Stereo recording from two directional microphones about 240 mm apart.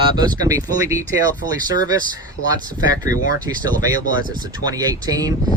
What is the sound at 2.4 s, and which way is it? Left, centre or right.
Speech, left.